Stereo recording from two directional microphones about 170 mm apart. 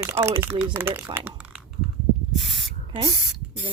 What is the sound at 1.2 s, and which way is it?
Typing, 10° right (ahead or behind).